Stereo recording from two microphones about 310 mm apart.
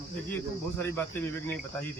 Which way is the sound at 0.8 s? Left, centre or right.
Centre.